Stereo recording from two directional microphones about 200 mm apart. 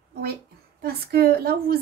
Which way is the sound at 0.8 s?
50° right (ahead or behind).